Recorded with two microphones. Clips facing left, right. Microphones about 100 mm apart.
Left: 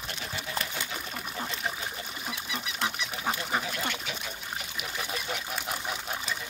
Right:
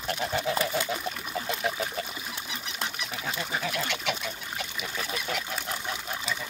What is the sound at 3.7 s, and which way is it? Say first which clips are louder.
Duck: right 3 dB; 75° right (ahead or behind).